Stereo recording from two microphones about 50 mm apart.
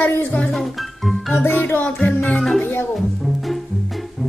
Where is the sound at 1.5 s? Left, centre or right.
Left.